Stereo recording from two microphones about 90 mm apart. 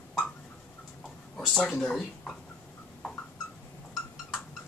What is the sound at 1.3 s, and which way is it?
Speech, centre (ahead or behind).